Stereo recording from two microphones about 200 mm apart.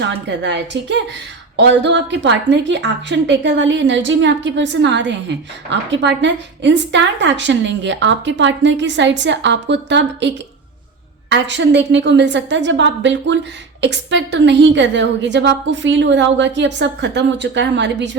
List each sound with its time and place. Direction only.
0.0 s a woman's voice: 60° right (ahead or behind)